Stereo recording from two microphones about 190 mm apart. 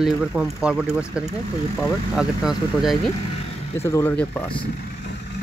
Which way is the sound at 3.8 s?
15° left (ahead or behind).